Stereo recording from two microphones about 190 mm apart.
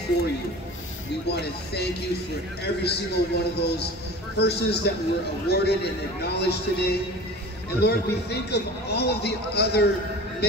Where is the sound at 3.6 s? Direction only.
60° left (ahead or behind).